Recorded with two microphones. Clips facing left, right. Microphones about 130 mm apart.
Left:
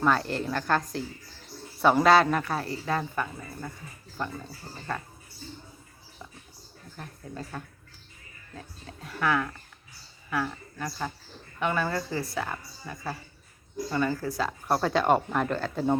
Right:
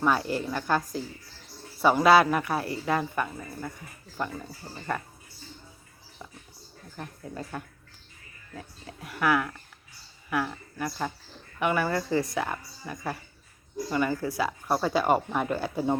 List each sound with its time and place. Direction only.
0.0 s speech: 5° right (ahead or behind)
6.9 s speech: 10° right (ahead or behind)
9.0 s speech: 10° right (ahead or behind)
10.8 s speech: 10° right (ahead or behind)